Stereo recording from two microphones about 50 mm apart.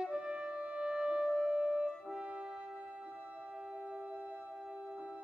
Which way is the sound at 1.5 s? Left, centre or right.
Centre.